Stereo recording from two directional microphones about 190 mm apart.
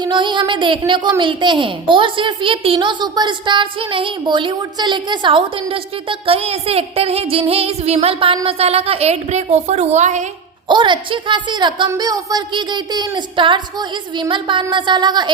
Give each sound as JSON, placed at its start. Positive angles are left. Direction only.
{"t": 0.0, "sound": "a woman's voice", "side_deg": -25}
{"t": 10.7, "sound": "a woman's voice", "side_deg": -25}